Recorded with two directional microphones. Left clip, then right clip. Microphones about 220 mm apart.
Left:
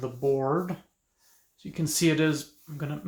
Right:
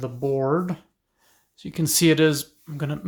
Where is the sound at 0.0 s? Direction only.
45° right (ahead or behind).